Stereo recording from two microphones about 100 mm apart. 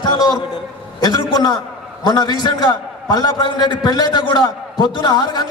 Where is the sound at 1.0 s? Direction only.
40° left (ahead or behind).